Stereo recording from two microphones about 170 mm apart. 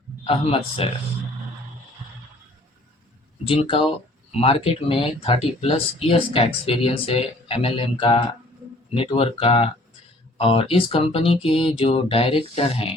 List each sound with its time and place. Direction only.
0.3 s speech: 35° left (ahead or behind)
3.4 s speech: 35° left (ahead or behind)